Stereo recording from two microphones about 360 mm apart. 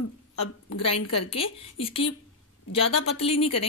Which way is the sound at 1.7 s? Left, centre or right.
Centre.